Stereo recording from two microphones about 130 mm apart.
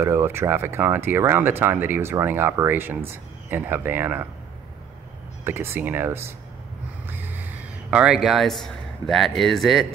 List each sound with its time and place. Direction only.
0.0 s speech: 20° right (ahead or behind)
5.4 s speech: 20° right (ahead or behind); by 9.9 s centre (ahead or behind)